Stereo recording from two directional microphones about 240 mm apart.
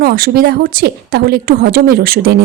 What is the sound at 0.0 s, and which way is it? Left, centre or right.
Speech, right.